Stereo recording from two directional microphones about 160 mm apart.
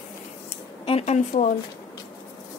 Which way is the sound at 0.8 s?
40° left (ahead or behind).